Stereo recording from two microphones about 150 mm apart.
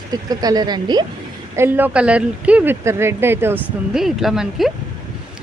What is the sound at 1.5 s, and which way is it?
Speech, 15° right (ahead or behind).